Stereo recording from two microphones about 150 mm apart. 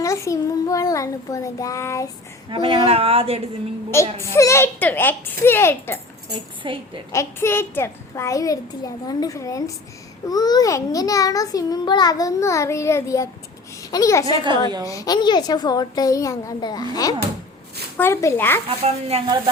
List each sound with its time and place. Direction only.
0.0 s a child's voice: 20° left (ahead or behind)
2.5 s a woman's voice: 35° right (ahead or behind)
3.9 s a woman's voice: 20° left (ahead or behind)
6.3 s a woman's voice: 35° right (ahead or behind)
7.1 s a child's voice: 20° left (ahead or behind)
14.3 s a woman's voice: 30° right (ahead or behind)
14.8 s a child's voice: 25° left (ahead or behind)
19.1 s a woman's voice: 40° right (ahead or behind)